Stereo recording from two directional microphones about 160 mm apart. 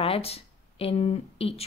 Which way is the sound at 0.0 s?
40° left (ahead or behind).